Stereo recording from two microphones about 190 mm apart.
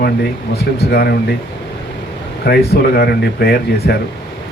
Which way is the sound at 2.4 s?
60° left (ahead or behind).